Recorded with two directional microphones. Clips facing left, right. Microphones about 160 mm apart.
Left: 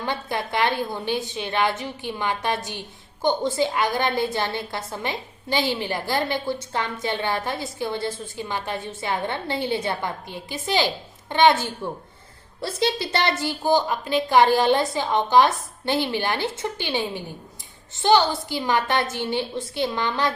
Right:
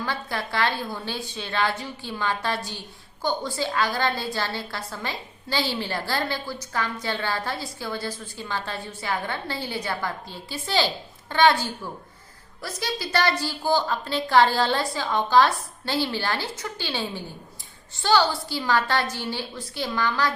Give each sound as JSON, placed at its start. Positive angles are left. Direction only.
{"t": 0.0, "sound": "a woman's voice", "side_deg": 20}